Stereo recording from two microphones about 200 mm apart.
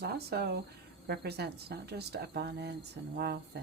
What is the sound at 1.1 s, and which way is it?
Speech, 55° right (ahead or behind).